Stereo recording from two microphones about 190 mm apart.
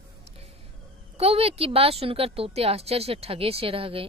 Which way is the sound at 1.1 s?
30° right (ahead or behind).